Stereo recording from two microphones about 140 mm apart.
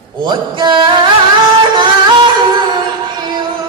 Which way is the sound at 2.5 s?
30° right (ahead or behind).